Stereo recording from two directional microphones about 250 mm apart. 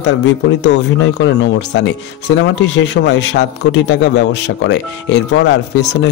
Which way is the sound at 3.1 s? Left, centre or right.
Left.